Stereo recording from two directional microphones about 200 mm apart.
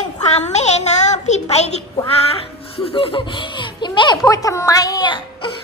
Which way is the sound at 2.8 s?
25° left (ahead or behind).